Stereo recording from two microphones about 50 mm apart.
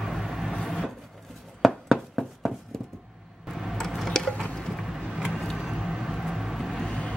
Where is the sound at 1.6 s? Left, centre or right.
Centre.